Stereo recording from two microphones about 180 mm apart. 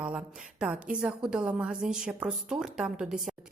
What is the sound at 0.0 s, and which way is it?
A woman's voice, 5° right (ahead or behind).